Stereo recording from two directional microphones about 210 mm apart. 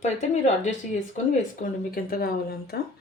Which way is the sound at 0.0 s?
35° left (ahead or behind).